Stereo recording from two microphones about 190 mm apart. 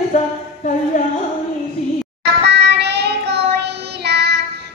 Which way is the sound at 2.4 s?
60° right (ahead or behind).